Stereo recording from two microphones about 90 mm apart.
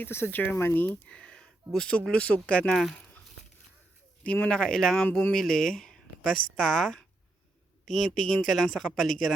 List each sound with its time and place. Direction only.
0.0 s speech: 25° left (ahead or behind); by 3.1 s 5° left (ahead or behind)
4.2 s speech: 15° left (ahead or behind)